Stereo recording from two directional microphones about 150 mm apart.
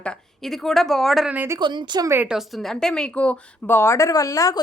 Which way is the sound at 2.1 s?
10° right (ahead or behind).